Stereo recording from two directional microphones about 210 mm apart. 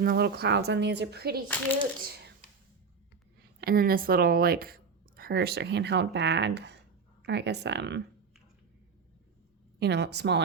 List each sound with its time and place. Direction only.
0.0 s a woman's voice: 45° right (ahead or behind)
3.6 s a woman's voice: 45° right (ahead or behind)
9.8 s a woman's voice: 50° right (ahead or behind)